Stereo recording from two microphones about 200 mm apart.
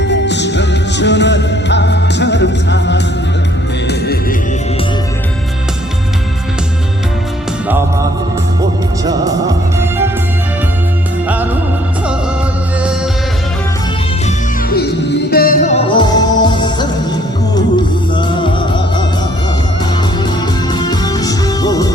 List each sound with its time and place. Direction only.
0.0 s music: 60° left (ahead or behind)
9.0 s music: 15° right (ahead or behind)
15.3 s music: 45° left (ahead or behind)
15.7 s music: 25° left (ahead or behind)
18.1 s music: 25° left (ahead or behind)
20.7 s music: 20° left (ahead or behind)